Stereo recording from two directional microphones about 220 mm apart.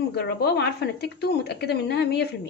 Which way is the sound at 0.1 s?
45° left (ahead or behind).